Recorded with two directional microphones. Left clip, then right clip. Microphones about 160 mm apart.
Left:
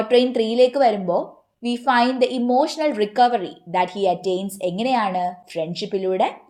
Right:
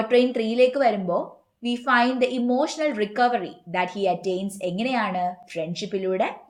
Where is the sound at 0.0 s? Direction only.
30° left (ahead or behind).